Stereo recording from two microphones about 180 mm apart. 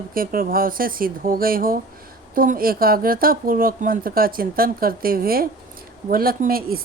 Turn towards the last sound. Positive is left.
turn(degrees=-55)  # may be behind; listen again after turning